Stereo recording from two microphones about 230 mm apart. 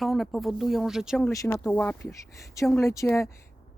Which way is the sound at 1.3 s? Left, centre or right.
Centre.